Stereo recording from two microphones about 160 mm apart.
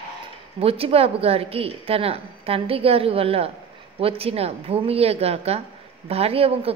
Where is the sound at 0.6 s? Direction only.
35° right (ahead or behind).